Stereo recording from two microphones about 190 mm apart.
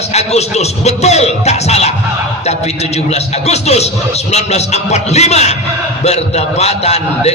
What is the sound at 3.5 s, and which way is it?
A man's voice, 35° left (ahead or behind).